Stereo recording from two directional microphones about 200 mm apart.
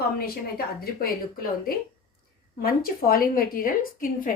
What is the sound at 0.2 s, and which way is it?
A woman's voice, 50° left (ahead or behind).